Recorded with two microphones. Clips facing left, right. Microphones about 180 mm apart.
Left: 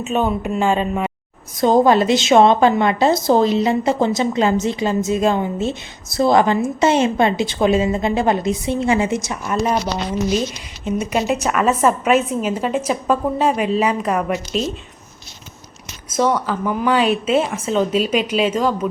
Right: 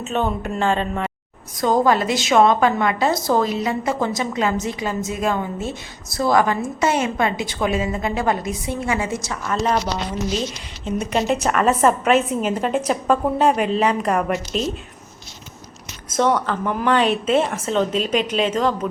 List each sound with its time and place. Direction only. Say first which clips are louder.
0.0 s speech: left 3 dB; 10° left (ahead or behind)
1.5 s a woman's voice: left 4 dB; 25° left (ahead or behind)
10.8 s a woman's voice: left 1 dB; 5° left (ahead or behind)
16.1 s a woman's voice: left 1 dB; 5° left (ahead or behind)